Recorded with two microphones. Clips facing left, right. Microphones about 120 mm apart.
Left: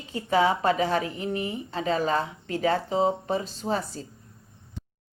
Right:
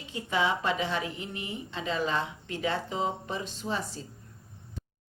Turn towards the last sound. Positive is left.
turn(degrees=40)  # may be behind; listen again after turning